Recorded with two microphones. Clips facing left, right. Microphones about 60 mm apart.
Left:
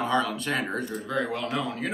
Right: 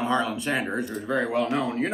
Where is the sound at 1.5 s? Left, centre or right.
Right.